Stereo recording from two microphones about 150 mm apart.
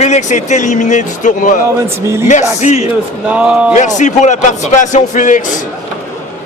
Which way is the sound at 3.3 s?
10° right (ahead or behind).